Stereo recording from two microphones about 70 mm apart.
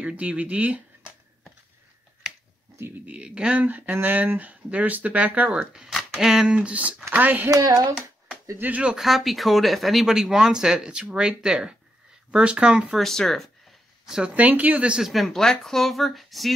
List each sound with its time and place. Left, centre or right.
0.0 s speech: centre
3.1 s speech: centre
5.7 s speech: centre; by 7.4 s right
7.5 s speech: right
8.5 s speech: right
8.9 s speech: centre
12.9 s a sound: centre
14.3 s speech: right
15.0 s speech: centre